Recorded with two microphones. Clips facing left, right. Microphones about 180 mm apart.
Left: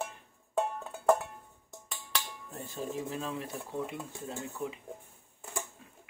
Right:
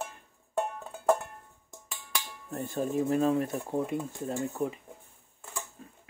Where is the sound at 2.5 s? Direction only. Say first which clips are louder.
Right 8 dB; 55° right (ahead or behind).